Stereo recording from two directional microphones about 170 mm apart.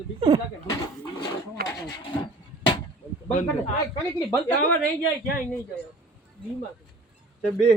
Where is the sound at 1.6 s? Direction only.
60° right (ahead or behind).